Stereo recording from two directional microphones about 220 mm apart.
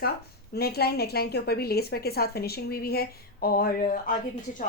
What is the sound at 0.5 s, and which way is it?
A woman's voice, 45° left (ahead or behind).